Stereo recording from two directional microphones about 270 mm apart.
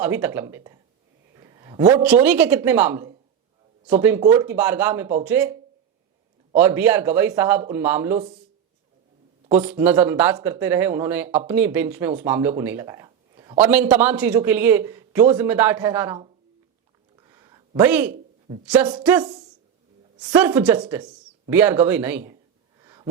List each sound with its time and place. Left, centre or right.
0.0 s a man's voice: centre
1.4 s a sound: centre
2.0 s a man's voice: centre
6.6 s a man's voice: centre
9.5 s speech: right
9.7 s a man's voice: centre
17.2 s a sound: centre
18.6 s speech: centre
20.1 s a man's voice: centre
22.8 s a sound: centre